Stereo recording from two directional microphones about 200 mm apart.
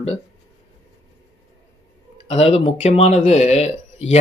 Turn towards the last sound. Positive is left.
turn(degrees=35)  # may be behind; listen again after turning